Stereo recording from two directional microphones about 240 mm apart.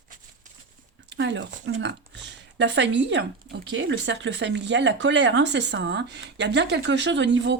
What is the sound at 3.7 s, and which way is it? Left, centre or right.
Speech, right.